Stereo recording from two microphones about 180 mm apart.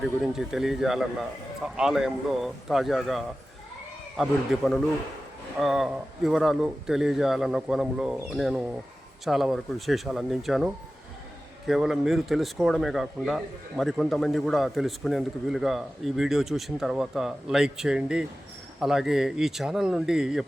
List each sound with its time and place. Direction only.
0.0 s a man's voice: 5° right (ahead or behind)